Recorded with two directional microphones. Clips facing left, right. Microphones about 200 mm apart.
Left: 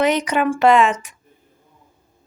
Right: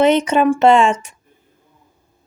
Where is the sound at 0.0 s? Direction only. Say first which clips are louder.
Right 5 dB; 25° right (ahead or behind).